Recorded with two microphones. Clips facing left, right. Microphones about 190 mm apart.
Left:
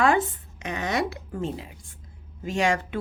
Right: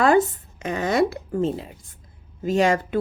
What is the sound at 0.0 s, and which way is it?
Speech, 35° right (ahead or behind).